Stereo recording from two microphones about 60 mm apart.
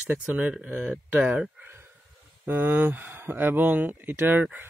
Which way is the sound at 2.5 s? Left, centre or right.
Right.